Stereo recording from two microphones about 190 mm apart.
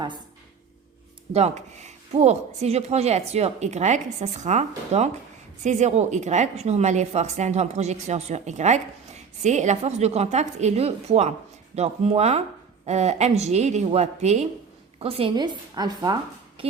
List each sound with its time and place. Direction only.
1.3 s a woman's voice: 35° right (ahead or behind)